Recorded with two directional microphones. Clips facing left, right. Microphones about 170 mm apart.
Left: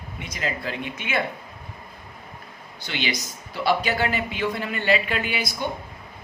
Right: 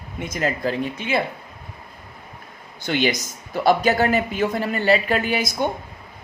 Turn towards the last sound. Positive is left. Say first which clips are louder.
# right 6 dB
turn(degrees=-45)  # may be behind; listen again after turning